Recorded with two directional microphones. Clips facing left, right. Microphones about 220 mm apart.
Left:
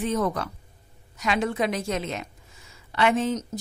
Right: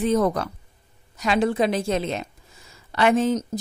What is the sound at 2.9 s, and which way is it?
Speech, 40° right (ahead or behind).